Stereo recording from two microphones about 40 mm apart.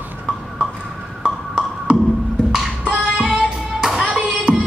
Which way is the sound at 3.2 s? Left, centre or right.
Centre.